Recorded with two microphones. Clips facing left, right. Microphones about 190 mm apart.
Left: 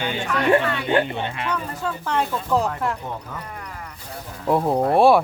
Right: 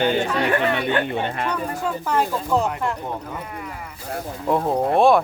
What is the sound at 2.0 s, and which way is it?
Speech, 5° right (ahead or behind).